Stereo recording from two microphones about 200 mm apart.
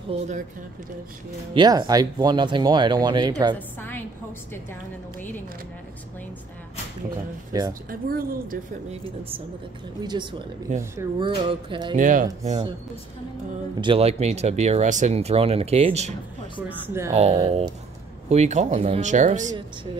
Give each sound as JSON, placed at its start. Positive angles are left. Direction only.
{"t": 0.1, "sound": "speech", "side_deg": -30}
{"t": 1.5, "sound": "speech", "side_deg": -20}
{"t": 3.5, "sound": "a woman's voice", "side_deg": 10}
{"t": 7.5, "sound": "speech", "side_deg": -15}
{"t": 7.9, "sound": "speech", "side_deg": -45}
{"t": 10.0, "sound": "speech", "side_deg": -25}
{"t": 11.2, "sound": "speech", "side_deg": -25}
{"t": 12.0, "sound": "speech", "side_deg": -40}
{"t": 13.7, "sound": "speech", "side_deg": -25}
{"t": 16.6, "sound": "speech", "side_deg": -10}
{"t": 17.1, "sound": "speech", "side_deg": -30}